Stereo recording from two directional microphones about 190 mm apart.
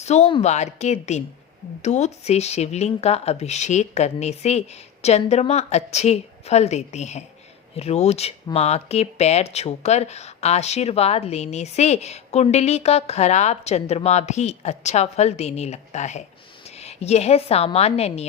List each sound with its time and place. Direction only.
0.0 s a woman's voice: 35° left (ahead or behind)